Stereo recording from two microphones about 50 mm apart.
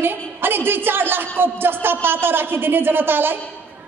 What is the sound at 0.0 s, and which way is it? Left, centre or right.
A woman's voice, right.